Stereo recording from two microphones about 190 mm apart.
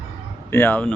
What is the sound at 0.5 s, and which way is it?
Speech, 10° left (ahead or behind).